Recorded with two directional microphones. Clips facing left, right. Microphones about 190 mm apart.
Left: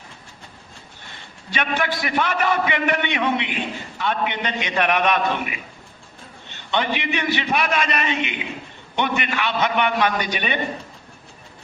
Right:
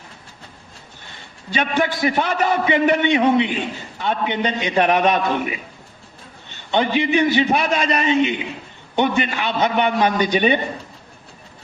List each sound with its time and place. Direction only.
1.5 s a man's voice: 30° right (ahead or behind)
6.7 s a man's voice: 30° right (ahead or behind)